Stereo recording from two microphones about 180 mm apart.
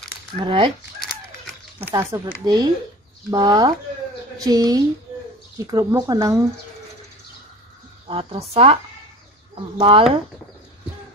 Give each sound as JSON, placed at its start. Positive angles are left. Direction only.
{"t": 0.4, "sound": "speech", "side_deg": -30}
{"t": 1.8, "sound": "speech", "side_deg": -15}
{"t": 8.1, "sound": "speech", "side_deg": -30}
{"t": 9.8, "sound": "speech", "side_deg": -30}